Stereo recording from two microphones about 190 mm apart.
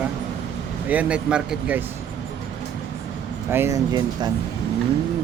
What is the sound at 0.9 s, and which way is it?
Speech, 5° right (ahead or behind).